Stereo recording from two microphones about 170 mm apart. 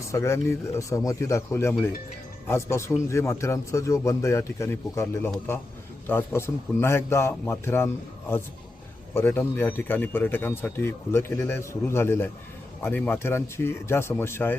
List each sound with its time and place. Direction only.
0.1 s speech: 15° left (ahead or behind)
9.1 s speech: 10° left (ahead or behind)